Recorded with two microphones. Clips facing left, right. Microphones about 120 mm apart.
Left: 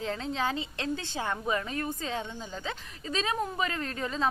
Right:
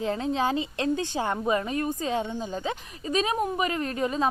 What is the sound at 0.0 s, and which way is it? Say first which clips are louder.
A woman's voice: right 5 dB; 15° right (ahead or behind).